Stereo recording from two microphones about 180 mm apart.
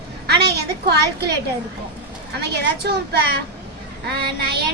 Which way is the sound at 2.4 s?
65° right (ahead or behind).